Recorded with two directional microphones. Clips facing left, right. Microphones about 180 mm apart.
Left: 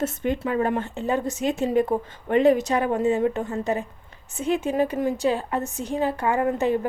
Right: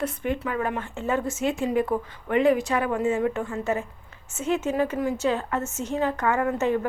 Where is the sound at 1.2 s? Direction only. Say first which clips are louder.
Left 1 dB; 15° left (ahead or behind).